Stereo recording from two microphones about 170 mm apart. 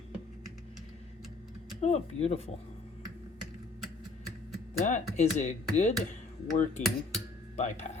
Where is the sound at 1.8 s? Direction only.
40° left (ahead or behind).